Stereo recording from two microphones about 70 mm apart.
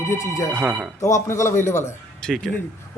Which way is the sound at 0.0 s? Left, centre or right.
Left.